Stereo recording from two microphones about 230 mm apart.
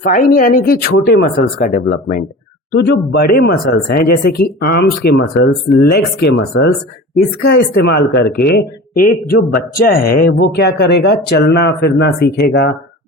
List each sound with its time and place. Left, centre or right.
0.0 s speech: left